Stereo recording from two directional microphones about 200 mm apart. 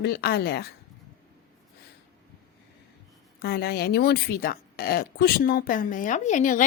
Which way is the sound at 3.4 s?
50° left (ahead or behind).